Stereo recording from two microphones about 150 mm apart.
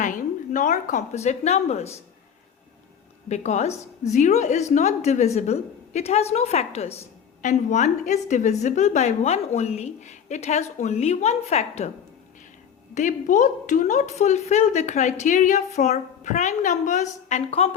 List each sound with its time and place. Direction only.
0.0 s a woman's voice: 60° left (ahead or behind)
3.2 s a woman's voice: 50° left (ahead or behind)
12.9 s a woman's voice: 55° left (ahead or behind)